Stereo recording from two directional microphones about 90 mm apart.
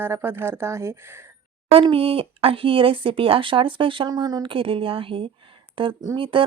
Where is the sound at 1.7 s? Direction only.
90° right; by 4.0 s 70° right (ahead or behind).